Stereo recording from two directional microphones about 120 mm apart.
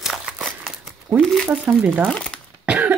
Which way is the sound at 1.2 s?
5° left (ahead or behind).